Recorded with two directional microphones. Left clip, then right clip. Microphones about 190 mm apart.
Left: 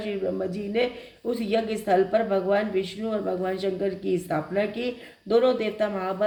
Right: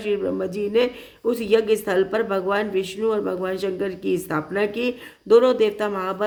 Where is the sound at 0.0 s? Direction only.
45° right (ahead or behind).